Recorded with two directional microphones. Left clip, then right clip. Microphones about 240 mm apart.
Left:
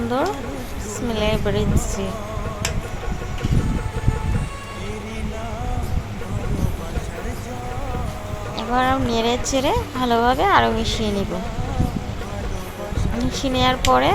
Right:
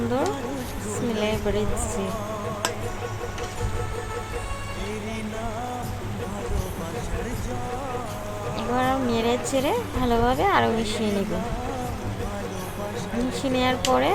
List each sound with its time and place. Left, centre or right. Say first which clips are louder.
1.1 s a woman's voice: left 4 dB; centre
8.5 s speech: left 5 dB; centre
13.3 s speech: left 5 dB; centre